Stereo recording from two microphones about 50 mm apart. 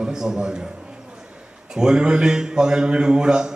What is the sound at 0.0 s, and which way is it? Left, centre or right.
Speech, centre.